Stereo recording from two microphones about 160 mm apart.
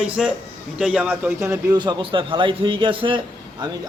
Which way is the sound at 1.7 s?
30° right (ahead or behind).